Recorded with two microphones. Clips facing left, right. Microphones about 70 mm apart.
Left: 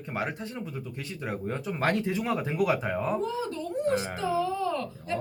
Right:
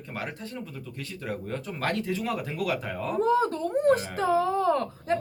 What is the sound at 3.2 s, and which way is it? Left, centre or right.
Speech, right.